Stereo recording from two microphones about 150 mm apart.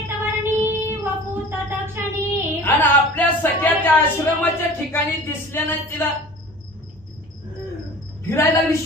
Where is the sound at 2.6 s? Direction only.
10° left (ahead or behind).